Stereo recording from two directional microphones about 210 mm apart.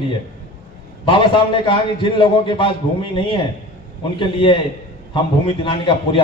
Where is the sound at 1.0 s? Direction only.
25° left (ahead or behind).